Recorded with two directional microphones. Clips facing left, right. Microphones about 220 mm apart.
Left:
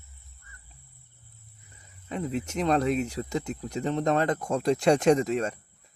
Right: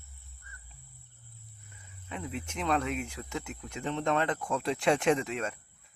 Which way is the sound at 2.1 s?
40° left (ahead or behind).